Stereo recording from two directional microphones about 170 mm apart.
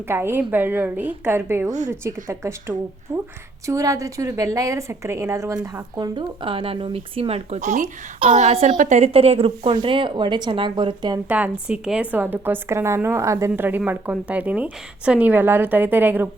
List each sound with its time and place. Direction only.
0.1 s a woman's voice: 15° right (ahead or behind)
11.3 s a woman's voice: 10° right (ahead or behind)